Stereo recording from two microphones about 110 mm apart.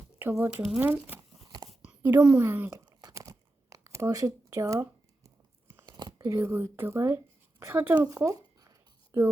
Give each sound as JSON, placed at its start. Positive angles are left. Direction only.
{"t": 0.2, "sound": "speech", "side_deg": -15}
{"t": 1.5, "sound": "a sound", "side_deg": -40}
{"t": 2.0, "sound": "speech", "side_deg": -15}
{"t": 2.7, "sound": "crumpling", "side_deg": -35}
{"t": 5.8, "sound": "a sound", "side_deg": -35}
{"t": 6.3, "sound": "speech", "side_deg": -20}
{"t": 8.1, "sound": "zipper", "side_deg": -25}
{"t": 9.1, "sound": "speech", "side_deg": -25}